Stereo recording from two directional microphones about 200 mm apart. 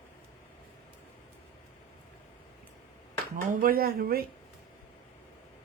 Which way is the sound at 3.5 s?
45° right (ahead or behind).